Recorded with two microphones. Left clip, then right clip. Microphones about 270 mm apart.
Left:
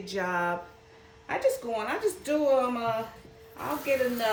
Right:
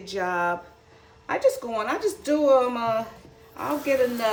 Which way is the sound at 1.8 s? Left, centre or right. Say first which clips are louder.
Right 4 dB; right.